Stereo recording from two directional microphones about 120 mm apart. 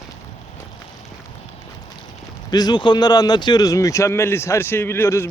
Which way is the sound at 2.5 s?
35° left (ahead or behind).